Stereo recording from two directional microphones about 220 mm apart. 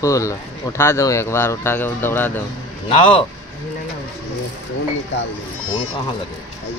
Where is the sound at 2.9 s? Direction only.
25° left (ahead or behind).